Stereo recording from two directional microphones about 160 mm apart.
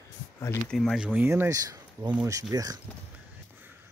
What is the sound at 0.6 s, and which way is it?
Speech, centre (ahead or behind).